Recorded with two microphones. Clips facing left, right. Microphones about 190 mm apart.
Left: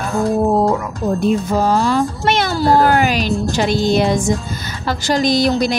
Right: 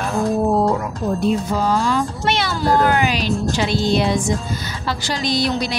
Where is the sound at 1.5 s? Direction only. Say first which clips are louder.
Left 3 dB; 45° left (ahead or behind).